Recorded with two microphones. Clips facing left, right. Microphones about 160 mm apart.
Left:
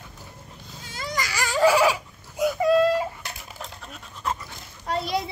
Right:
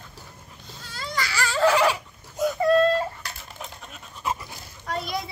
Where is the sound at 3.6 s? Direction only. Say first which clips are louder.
Even; centre (ahead or behind).